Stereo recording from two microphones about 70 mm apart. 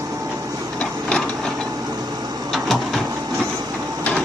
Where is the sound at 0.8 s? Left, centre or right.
Centre.